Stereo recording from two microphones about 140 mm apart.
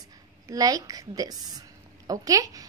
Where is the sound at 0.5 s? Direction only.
25° right (ahead or behind).